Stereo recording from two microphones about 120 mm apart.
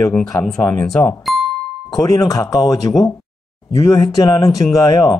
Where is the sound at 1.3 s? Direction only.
Centre (ahead or behind).